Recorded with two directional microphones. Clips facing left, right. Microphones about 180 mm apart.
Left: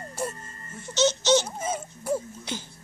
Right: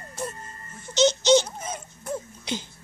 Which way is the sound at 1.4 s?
5° left (ahead or behind).